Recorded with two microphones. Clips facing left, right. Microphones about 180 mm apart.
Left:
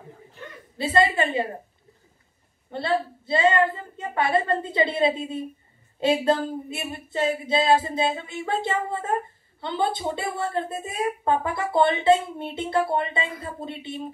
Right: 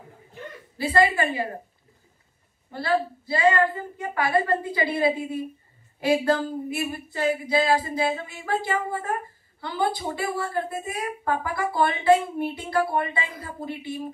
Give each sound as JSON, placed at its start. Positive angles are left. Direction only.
{"t": 0.7, "sound": "a woman's voice", "side_deg": 25}
{"t": 2.7, "sound": "a woman's voice", "side_deg": 25}